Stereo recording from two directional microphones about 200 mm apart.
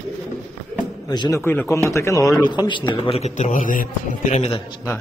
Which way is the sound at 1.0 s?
20° left (ahead or behind).